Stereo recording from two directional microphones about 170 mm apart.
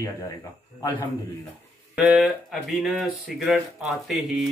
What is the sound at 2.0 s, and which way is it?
Speech, 5° right (ahead or behind).